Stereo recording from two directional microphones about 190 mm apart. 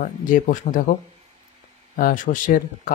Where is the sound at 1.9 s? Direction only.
45° left (ahead or behind).